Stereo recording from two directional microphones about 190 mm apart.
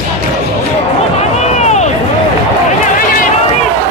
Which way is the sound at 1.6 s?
35° left (ahead or behind).